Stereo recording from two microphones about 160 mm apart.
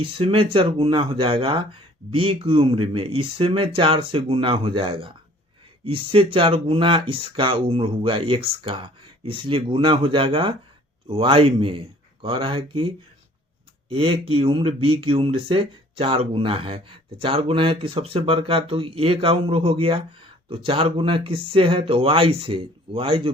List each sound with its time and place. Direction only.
0.0 s speech: 35° right (ahead or behind)
13.9 s speech: 35° right (ahead or behind)